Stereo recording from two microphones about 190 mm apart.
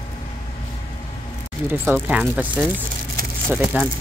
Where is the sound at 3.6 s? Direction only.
10° right (ahead or behind).